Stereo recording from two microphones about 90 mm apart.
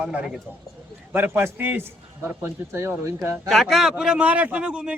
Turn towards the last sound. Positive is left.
turn(degrees=-10)  # may be behind; listen again after turning